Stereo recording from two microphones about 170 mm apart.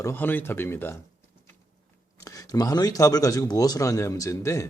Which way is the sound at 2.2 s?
20° left (ahead or behind).